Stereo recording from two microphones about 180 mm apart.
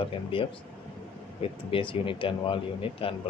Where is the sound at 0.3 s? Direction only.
30° left (ahead or behind).